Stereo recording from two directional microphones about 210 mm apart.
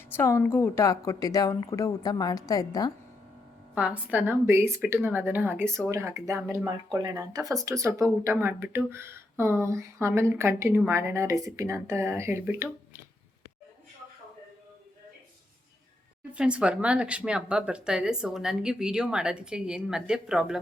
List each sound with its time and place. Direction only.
0.1 s a woman's voice: 10° left (ahead or behind)
3.8 s speech: 5° right (ahead or behind)
16.3 s speech: 5° right (ahead or behind)